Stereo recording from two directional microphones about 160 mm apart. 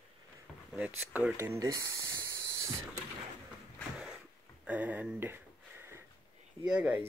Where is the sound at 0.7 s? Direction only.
10° right (ahead or behind).